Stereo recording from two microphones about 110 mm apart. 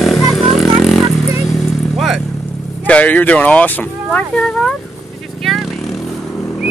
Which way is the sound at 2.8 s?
15° left (ahead or behind).